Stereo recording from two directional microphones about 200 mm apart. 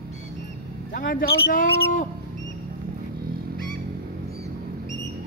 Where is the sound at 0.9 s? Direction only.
45° left (ahead or behind).